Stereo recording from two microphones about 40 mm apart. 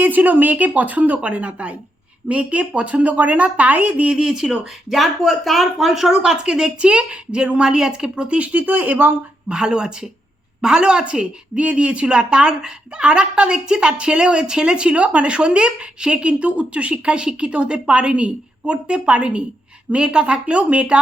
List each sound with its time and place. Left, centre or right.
0.0 s speech: right
4.1 s speech: centre
4.9 s speech: centre
6.3 s a woman's voice: right
8.5 s speech: right
9.5 s a woman's voice: centre